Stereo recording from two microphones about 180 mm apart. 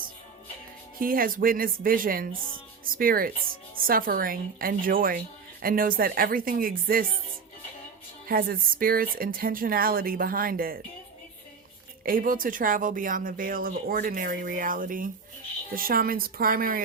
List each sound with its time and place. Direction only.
0.9 s speech: 50° right (ahead or behind)
8.3 s speech: 55° right (ahead or behind)
12.0 s speech: 50° right (ahead or behind)